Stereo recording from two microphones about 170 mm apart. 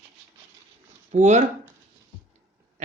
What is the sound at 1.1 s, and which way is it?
Speech, 45° right (ahead or behind).